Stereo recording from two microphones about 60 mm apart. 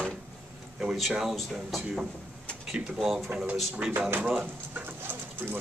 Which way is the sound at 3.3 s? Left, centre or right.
Right.